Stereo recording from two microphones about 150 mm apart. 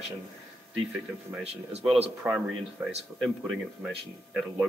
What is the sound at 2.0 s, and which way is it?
Speech, 10° right (ahead or behind).